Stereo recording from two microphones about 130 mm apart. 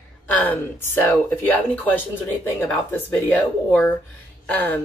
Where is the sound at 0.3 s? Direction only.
15° left (ahead or behind).